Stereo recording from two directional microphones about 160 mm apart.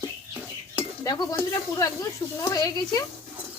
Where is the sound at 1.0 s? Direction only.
20° left (ahead or behind).